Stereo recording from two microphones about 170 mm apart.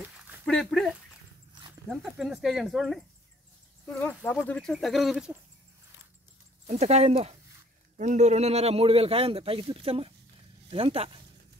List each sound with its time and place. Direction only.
0.5 s speech: 5° left (ahead or behind)
3.8 s speech: 10° left (ahead or behind)
6.7 s a man's voice: 40° right (ahead or behind)